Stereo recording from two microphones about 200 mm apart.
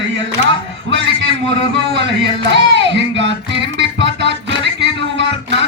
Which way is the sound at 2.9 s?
65° right (ahead or behind).